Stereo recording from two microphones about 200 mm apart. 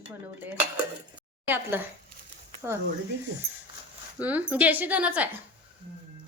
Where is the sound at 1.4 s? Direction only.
10° right (ahead or behind).